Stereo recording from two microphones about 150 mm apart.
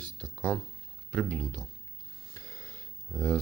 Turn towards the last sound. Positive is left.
turn(degrees=5)  # may be behind; listen again after turning